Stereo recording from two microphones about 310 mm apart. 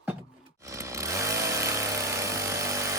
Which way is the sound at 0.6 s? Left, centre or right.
Centre.